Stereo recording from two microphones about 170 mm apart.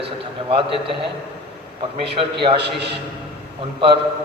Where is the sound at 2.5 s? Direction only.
80° right.